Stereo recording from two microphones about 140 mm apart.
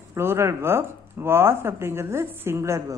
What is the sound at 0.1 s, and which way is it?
A woman's voice, 20° right (ahead or behind).